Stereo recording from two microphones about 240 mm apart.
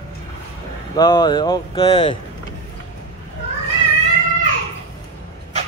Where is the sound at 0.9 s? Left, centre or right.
Centre.